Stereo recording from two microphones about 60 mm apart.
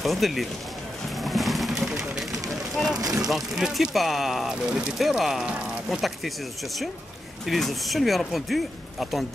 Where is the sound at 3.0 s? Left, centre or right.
Right.